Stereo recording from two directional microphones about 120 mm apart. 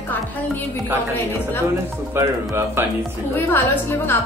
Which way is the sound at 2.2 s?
20° right (ahead or behind).